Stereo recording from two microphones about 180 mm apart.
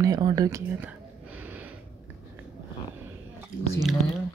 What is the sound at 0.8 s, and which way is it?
Gasp, 10° right (ahead or behind).